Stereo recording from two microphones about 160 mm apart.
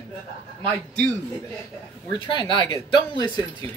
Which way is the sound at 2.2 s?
30° left (ahead or behind).